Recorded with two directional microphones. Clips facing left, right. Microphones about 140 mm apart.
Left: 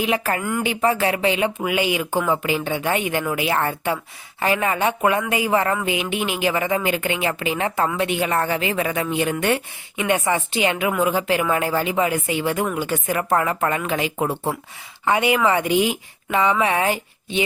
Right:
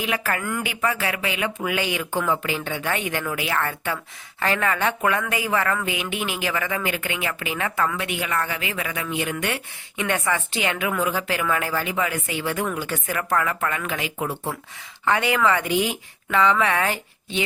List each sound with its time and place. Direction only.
0.0 s speech: 25° left (ahead or behind)
1.5 s speech: 15° left (ahead or behind)
10.0 s speech: 15° left (ahead or behind)
15.0 s speech: 15° left (ahead or behind)